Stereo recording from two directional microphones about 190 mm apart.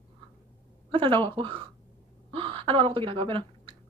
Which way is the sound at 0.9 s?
25° right (ahead or behind).